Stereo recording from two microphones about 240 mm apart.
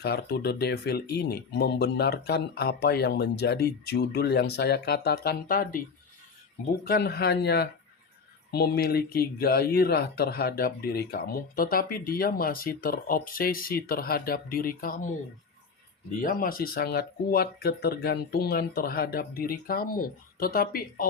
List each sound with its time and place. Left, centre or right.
0.0 s speech: left
6.8 s speech: left
16.2 s speech: left